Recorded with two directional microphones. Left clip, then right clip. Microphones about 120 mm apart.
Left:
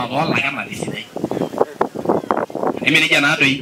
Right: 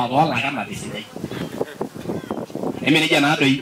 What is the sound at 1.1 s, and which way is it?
Speech, 80° left.